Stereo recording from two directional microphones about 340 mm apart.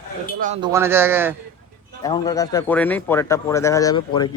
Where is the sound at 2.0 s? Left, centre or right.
Centre.